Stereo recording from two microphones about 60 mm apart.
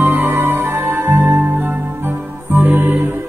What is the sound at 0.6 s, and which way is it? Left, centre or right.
Music, right.